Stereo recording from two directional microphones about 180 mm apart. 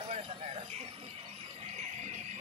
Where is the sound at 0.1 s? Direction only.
35° right (ahead or behind).